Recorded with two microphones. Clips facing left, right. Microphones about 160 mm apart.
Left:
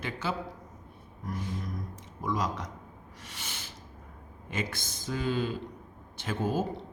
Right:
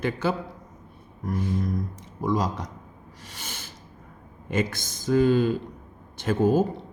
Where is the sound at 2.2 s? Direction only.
35° right (ahead or behind).